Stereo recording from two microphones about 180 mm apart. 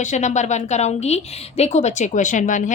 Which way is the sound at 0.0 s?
40° left (ahead or behind).